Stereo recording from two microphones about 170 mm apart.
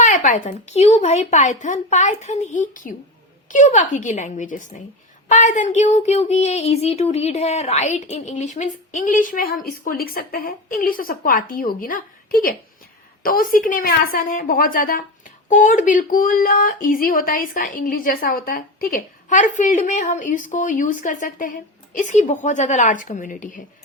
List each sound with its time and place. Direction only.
0.0 s a woman's voice: 50° left (ahead or behind)